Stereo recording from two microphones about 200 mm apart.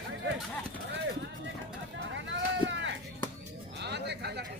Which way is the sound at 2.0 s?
65° right (ahead or behind).